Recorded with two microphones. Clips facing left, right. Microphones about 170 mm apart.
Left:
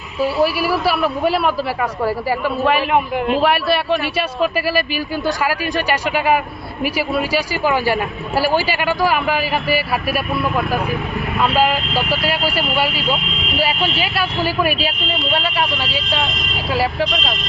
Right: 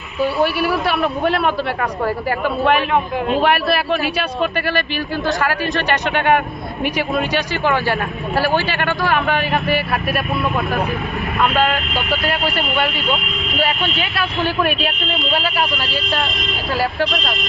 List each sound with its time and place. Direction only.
0.2 s a man's voice: centre (ahead or behind)
11.5 s a man's voice: 5° left (ahead or behind)